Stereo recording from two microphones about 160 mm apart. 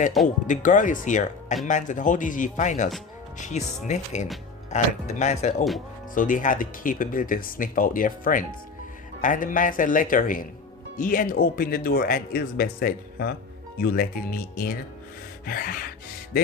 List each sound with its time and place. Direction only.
0.4 s speech: 50° left (ahead or behind)